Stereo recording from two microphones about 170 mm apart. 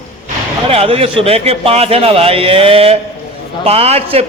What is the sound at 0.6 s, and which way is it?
A man's voice, 35° right (ahead or behind).